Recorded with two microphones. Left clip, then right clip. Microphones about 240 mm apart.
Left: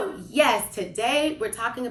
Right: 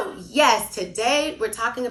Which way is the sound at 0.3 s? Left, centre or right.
Right.